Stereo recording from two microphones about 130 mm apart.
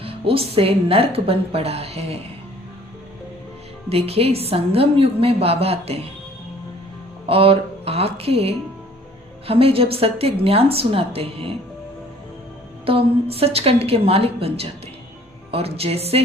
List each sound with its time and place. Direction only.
0.0 s a woman's voice: 45° right (ahead or behind)
3.8 s a woman's voice: 50° right (ahead or behind)
7.3 s a woman's voice: 45° right (ahead or behind)
12.8 s a woman's voice: 45° right (ahead or behind)